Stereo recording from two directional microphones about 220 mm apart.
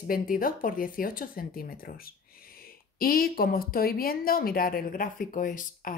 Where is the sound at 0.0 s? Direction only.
40° left (ahead or behind).